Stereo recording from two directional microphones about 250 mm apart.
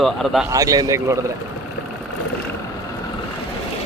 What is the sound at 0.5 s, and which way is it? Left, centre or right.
Speech, centre.